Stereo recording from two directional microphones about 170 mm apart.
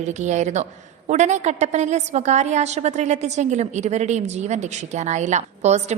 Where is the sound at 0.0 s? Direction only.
45° right (ahead or behind).